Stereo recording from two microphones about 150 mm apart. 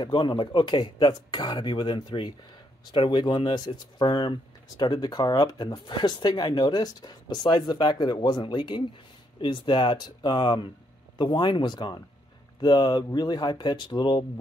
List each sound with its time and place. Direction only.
0.0 s speech: 30° left (ahead or behind)